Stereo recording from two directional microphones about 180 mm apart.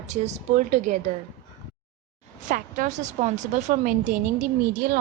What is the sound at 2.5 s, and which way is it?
A woman's voice, 45° right (ahead or behind).